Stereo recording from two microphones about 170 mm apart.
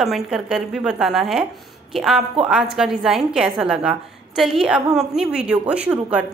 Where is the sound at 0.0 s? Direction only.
Centre (ahead or behind).